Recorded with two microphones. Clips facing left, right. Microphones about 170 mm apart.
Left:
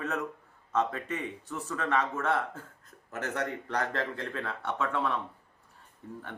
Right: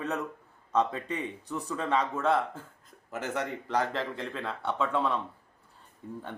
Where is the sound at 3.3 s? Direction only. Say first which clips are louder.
Right 3 dB; 20° right (ahead or behind).